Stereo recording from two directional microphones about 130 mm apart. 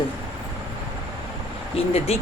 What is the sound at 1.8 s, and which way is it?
Speech, 50° left (ahead or behind).